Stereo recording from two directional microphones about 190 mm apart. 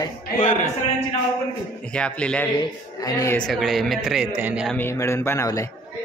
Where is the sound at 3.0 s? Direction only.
20° left (ahead or behind).